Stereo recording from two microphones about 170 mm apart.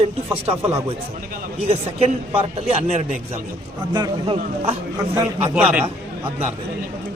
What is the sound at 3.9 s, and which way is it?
Speech, 25° right (ahead or behind).